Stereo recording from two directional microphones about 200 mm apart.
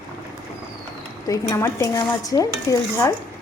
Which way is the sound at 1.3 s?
15° left (ahead or behind).